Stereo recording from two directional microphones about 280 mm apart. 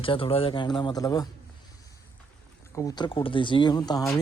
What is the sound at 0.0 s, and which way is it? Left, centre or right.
Speech, centre.